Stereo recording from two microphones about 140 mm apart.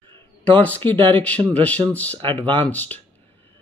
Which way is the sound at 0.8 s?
35° right (ahead or behind).